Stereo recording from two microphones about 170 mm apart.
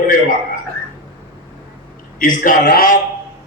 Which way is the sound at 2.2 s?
50° left (ahead or behind).